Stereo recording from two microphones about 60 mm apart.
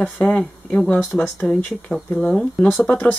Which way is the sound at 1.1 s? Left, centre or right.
Left.